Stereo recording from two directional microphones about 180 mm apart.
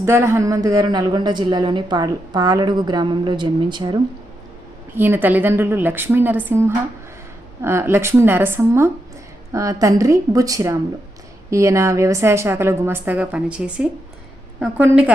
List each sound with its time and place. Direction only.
0.0 s speech: 15° right (ahead or behind)
4.9 s a woman's voice: 10° right (ahead or behind)